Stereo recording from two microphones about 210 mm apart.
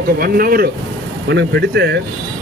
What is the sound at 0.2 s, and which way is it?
Speech, 45° right (ahead or behind).